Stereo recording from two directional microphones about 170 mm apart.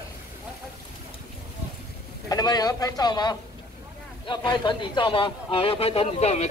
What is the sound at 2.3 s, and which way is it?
A man's voice, 20° left (ahead or behind).